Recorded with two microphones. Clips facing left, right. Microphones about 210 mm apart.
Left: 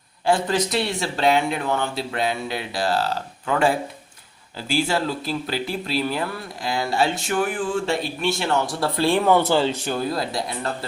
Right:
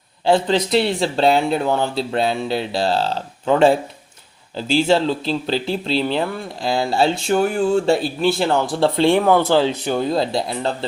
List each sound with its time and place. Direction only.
0.3 s speech: 25° right (ahead or behind)
9.2 s speech: 5° right (ahead or behind)
9.9 s speech: 20° right (ahead or behind)